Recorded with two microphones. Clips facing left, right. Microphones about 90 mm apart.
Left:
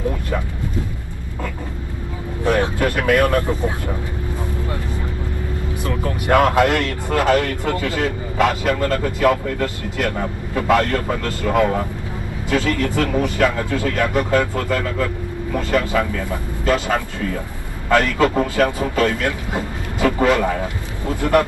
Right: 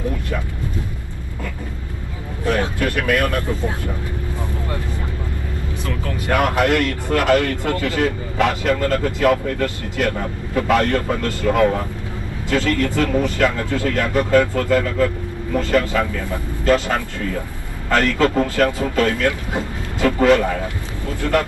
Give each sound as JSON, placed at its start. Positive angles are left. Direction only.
{"t": 2.4, "sound": "vehicle", "side_deg": 20}
{"t": 5.9, "sound": "speech", "side_deg": 20}